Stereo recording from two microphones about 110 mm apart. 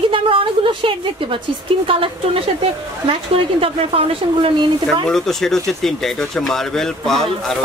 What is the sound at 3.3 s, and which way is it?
Speech, 55° right (ahead or behind).